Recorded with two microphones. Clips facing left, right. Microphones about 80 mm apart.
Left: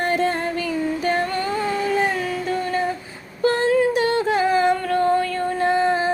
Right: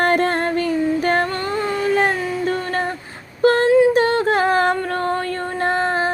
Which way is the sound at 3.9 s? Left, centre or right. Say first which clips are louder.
Right 3 dB; right.